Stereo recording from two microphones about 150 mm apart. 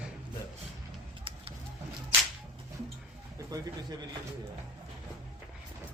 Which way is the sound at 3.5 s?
25° right (ahead or behind).